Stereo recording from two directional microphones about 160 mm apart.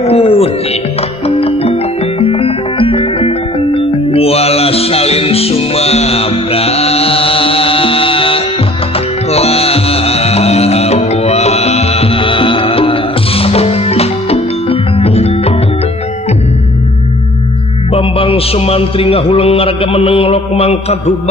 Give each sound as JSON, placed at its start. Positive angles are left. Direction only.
{"t": 0.0, "sound": "music", "side_deg": 40}
{"t": 17.9, "sound": "a man's voice", "side_deg": 35}